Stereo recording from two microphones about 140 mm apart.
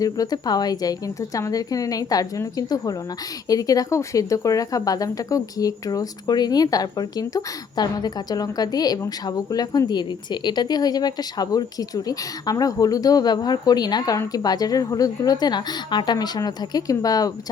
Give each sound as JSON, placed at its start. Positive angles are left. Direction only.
{"t": 0.0, "sound": "speech", "side_deg": 25}